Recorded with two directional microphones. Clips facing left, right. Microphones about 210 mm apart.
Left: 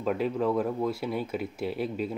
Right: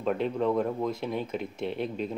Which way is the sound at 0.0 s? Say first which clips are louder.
Even; 5° left (ahead or behind).